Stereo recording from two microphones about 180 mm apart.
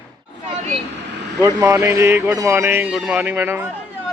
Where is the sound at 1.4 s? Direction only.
15° right (ahead or behind).